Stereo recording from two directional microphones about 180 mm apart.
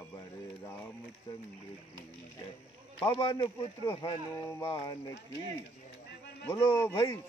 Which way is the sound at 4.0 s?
15° left (ahead or behind).